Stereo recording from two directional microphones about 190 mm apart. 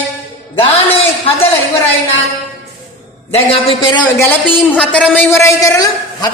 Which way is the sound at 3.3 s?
30° left (ahead or behind).